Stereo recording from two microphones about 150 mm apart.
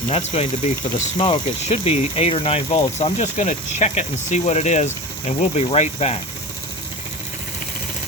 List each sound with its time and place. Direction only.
0.1 s speech: 40° left (ahead or behind)